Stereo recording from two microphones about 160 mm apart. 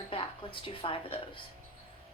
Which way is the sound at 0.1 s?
35° left (ahead or behind).